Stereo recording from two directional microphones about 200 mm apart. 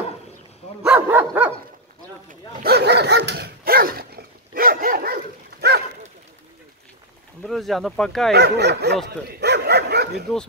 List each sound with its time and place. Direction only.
0.8 s dog: 10° right (ahead or behind)
2.6 s dog: 55° right (ahead or behind)
7.4 s speech: centre (ahead or behind)
8.3 s speech: 55° right (ahead or behind)
9.4 s dog: 55° right (ahead or behind)